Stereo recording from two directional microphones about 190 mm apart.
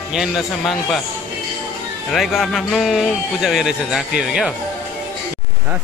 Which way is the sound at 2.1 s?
Centre (ahead or behind).